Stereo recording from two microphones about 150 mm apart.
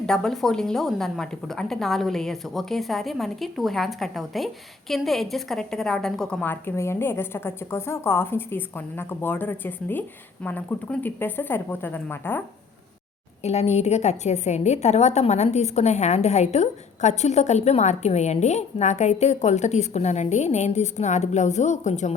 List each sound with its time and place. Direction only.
0.0 s a woman's voice: 5° left (ahead or behind)
13.4 s a woman's voice: 45° left (ahead or behind)